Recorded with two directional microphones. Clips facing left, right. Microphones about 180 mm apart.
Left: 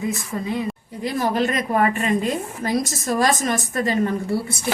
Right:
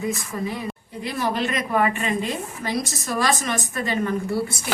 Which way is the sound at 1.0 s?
45° left (ahead or behind).